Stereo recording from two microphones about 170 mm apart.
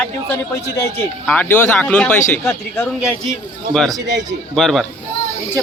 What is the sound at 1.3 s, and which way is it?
Speech, 10° left (ahead or behind).